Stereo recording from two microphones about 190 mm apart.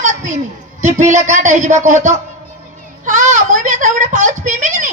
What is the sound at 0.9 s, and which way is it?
A woman's voice, 40° right (ahead or behind).